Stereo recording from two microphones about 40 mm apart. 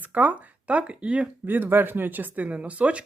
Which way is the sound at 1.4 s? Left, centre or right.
Right.